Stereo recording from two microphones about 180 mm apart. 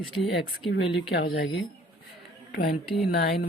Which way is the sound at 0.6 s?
85° left.